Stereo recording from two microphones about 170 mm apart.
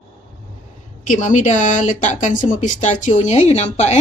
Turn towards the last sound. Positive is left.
turn(degrees=40)  # may be behind; listen again after turning